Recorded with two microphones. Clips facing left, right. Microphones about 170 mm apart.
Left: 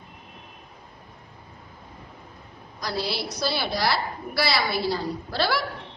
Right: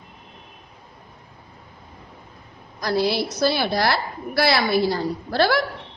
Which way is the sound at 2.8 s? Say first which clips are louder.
Right 8 dB; 50° right (ahead or behind).